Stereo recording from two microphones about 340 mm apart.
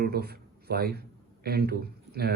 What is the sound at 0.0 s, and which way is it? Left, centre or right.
A man's voice, right.